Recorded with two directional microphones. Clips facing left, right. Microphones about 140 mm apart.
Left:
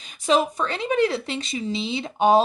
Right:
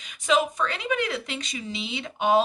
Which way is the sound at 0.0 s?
35° left (ahead or behind).